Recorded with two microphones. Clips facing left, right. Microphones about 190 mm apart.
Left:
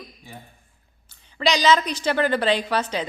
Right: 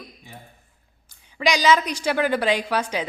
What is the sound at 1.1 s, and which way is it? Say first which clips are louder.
A woman's voice: even; 10° right (ahead or behind).